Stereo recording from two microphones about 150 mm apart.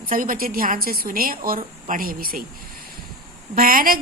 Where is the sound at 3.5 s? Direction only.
75° right (ahead or behind).